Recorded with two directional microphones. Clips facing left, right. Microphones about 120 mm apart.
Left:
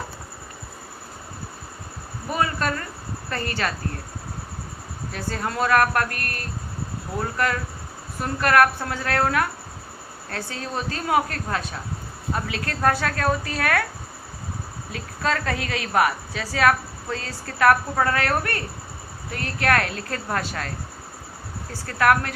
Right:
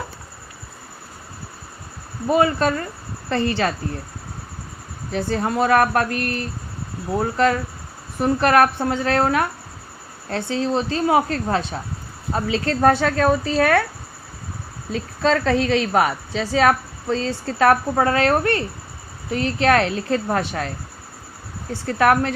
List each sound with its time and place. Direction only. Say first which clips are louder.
2.3 s a woman's voice: right 7 dB; 25° right (ahead or behind)
5.1 s a woman's voice: right 7 dB; 25° right (ahead or behind)
14.9 s a woman's voice: right 6 dB; 25° right (ahead or behind)